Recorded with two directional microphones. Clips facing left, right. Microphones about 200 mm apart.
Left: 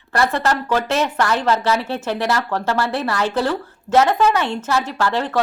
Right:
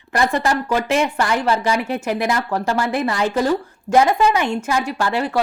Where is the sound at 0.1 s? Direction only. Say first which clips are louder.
Even; 15° right (ahead or behind).